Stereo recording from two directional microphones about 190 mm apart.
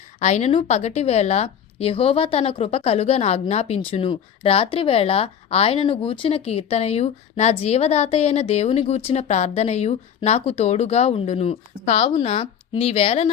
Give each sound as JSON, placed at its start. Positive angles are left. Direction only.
{"t": 0.2, "sound": "a woman's voice", "side_deg": 35}